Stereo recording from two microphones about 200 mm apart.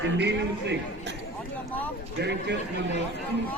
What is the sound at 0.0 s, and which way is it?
Speech, 60° right (ahead or behind).